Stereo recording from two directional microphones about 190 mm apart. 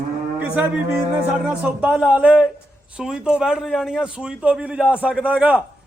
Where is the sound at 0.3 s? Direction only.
10° right (ahead or behind).